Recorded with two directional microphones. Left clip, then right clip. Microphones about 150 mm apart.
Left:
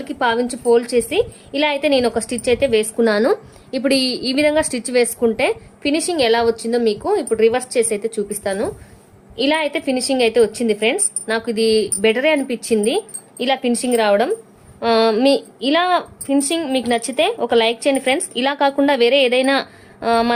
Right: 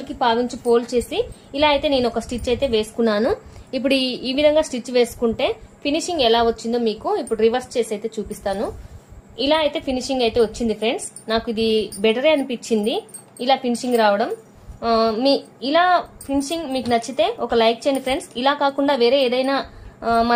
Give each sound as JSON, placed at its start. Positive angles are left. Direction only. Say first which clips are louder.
{"t": 0.1, "sound": "a woman's voice", "louder": "left 1 dB", "side_deg": 45}
{"t": 3.7, "sound": "a woman's voice", "louder": "left 2 dB", "side_deg": 20}
{"t": 13.4, "sound": "a woman's voice", "louder": "left 1 dB", "side_deg": 50}